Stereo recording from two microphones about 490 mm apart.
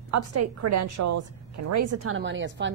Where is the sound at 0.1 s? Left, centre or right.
Right.